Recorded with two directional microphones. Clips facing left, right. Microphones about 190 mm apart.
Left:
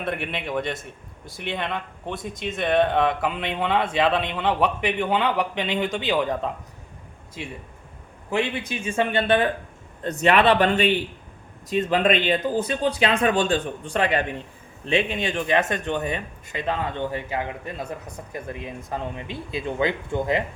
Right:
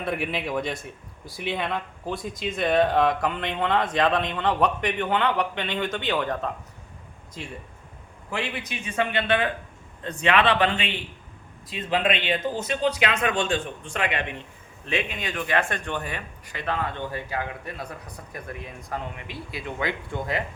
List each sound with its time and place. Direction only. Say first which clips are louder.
0.0 s speech: right 1 dB; centre (ahead or behind)
8.3 s speech: left 6 dB; 25° left (ahead or behind)
10.0 s a man's voice: left 3 dB; 45° left (ahead or behind); by 20.4 s 20° left (ahead or behind)